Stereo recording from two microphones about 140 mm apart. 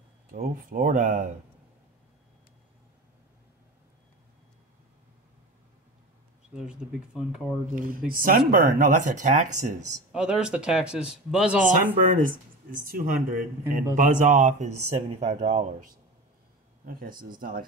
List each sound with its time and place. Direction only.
0.3 s speech: 85° right; by 1.3 s 65° right (ahead or behind)
6.5 s speech: 5° right (ahead or behind)
7.7 s speech: 85° right; by 9.8 s 60° right (ahead or behind)
10.1 s speech: 5° right (ahead or behind)
12.1 s speech: 70° right (ahead or behind); by 15.9 s 55° right (ahead or behind)
16.8 s speech: 90° right